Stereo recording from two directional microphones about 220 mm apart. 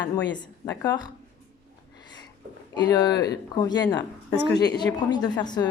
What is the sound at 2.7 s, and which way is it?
A woman's voice, 20° left (ahead or behind).